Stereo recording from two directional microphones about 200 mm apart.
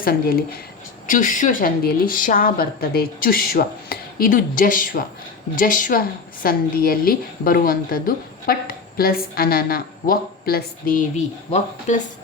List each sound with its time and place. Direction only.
0.0 s a woman's voice: 45° left (ahead or behind)